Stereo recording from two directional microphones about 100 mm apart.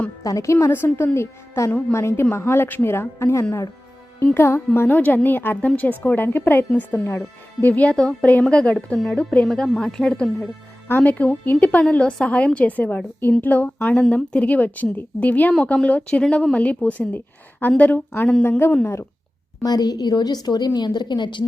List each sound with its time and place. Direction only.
0.2 s a woman's voice: 35° left (ahead or behind); by 10.5 s 5° left (ahead or behind)
10.8 s a woman's voice: 20° left (ahead or behind)
19.6 s a woman's voice: 40° left (ahead or behind)